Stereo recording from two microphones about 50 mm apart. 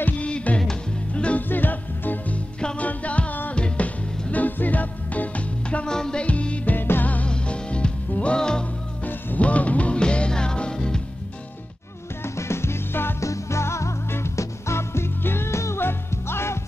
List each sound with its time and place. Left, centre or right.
0.2 s music: left
0.6 s music: centre
1.5 s music: left
4.3 s music: left
5.9 s music: centre
6.2 s music: left
7.2 s music: centre
9.0 s music: left
12.2 s music: left
13.2 s music: left
15.8 s music: left